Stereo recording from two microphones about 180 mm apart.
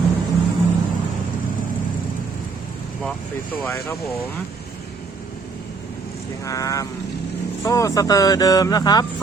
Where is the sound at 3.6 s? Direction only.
15° left (ahead or behind).